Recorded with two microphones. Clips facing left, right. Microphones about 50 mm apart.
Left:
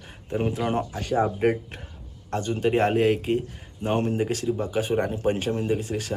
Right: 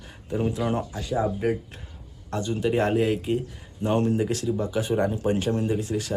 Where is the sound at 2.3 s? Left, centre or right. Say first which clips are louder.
Left 1 dB; left.